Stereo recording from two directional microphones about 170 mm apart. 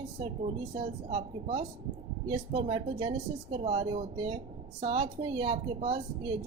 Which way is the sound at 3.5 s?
40° right (ahead or behind).